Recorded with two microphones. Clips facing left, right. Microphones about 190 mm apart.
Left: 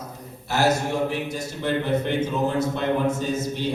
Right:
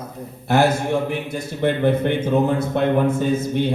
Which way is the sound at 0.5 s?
55° right (ahead or behind).